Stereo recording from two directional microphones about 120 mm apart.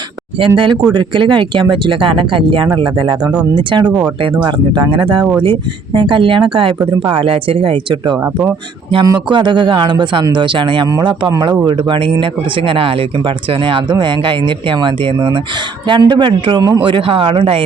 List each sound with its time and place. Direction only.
0.3 s speech: 45° right (ahead or behind)
9.3 s speech: 40° right (ahead or behind)